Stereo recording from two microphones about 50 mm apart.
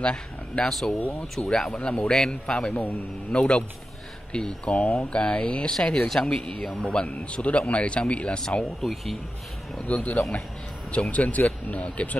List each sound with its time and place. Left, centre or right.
0.0 s speech: centre
0.7 s speech: centre
1.7 s speech: centre
6.9 s speech: left
8.8 s speech: centre
9.8 s speech: left